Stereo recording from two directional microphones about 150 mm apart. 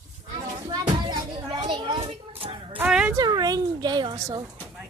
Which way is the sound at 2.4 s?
40° right (ahead or behind).